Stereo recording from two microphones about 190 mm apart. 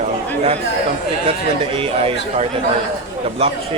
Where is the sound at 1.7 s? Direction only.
30° right (ahead or behind).